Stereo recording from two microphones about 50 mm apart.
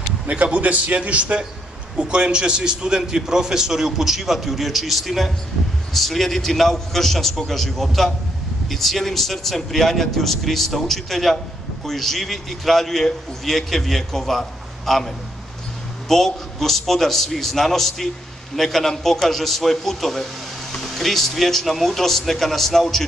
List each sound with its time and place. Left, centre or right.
0.3 s a man's voice: right; by 23.0 s centre